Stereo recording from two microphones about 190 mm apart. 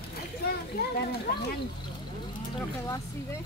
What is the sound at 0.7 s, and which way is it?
Speech, 55° left (ahead or behind).